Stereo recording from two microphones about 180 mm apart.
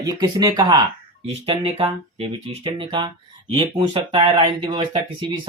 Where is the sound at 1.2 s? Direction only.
35° right (ahead or behind).